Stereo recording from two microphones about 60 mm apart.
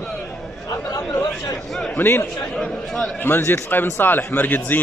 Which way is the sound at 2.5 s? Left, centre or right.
Centre.